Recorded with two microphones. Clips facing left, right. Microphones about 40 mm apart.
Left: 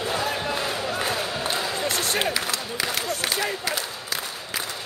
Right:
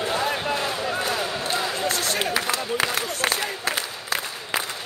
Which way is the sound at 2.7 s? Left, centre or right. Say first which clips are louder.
Right 2 dB; right.